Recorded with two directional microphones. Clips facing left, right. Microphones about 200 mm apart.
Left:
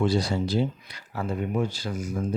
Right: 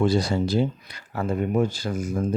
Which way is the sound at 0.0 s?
50° right (ahead or behind).